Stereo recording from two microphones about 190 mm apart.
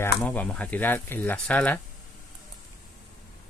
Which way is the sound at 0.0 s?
10° left (ahead or behind).